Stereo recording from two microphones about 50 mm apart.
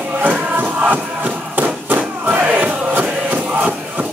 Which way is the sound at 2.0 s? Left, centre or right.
Right.